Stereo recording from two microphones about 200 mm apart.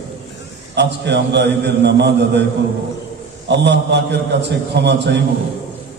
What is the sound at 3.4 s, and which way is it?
A man's voice, 60° right (ahead or behind).